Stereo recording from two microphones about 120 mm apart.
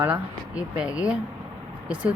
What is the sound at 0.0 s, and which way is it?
Speech, 10° right (ahead or behind).